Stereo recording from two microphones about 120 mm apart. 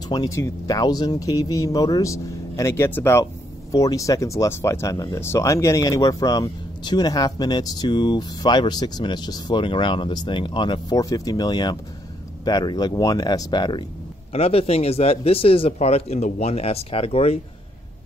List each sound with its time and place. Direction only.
0.1 s speech: 30° left (ahead or behind)
11.0 s speech: 30° left (ahead or behind)
14.3 s speech: 55° left (ahead or behind)